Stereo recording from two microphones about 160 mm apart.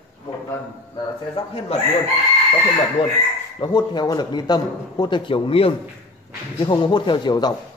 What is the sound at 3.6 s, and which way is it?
A man's voice, 25° left (ahead or behind).